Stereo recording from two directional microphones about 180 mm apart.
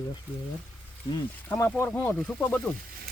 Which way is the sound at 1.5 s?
10° left (ahead or behind).